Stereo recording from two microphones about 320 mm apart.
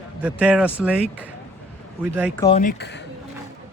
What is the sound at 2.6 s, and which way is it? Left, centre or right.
Speech, left.